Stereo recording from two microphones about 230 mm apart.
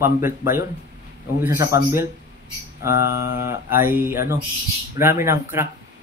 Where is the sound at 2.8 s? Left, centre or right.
Centre.